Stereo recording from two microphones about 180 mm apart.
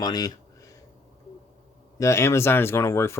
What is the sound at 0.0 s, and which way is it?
Speech, 20° left (ahead or behind).